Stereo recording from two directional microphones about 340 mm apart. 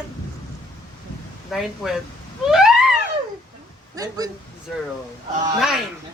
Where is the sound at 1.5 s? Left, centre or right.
Centre.